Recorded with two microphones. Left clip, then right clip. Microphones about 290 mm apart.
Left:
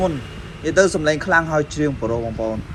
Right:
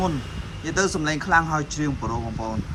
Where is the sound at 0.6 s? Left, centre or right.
Centre.